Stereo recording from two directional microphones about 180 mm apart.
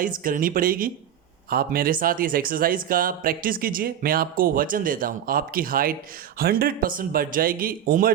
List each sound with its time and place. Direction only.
0.0 s speech: 50° right (ahead or behind)